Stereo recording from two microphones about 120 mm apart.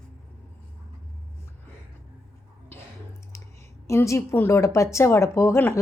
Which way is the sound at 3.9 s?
25° left (ahead or behind).